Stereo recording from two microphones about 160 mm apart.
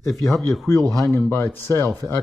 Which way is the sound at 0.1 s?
Centre (ahead or behind).